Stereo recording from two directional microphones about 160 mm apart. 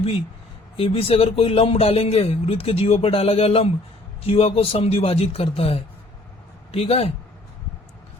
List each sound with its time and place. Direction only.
0.8 s a man's voice: 35° left (ahead or behind)